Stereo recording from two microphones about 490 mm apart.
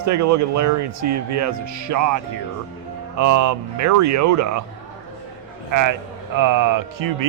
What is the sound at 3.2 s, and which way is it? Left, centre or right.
Speech, right.